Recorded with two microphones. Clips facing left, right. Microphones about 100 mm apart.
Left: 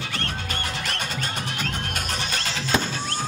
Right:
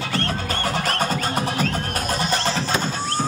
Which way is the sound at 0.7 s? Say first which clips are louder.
Right 7 dB; 40° right (ahead or behind).